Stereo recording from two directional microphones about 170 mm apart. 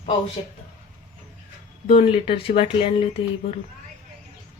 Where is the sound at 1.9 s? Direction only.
40° left (ahead or behind).